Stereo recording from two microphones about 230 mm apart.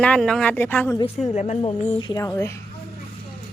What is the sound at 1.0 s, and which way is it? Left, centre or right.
A woman's voice, left.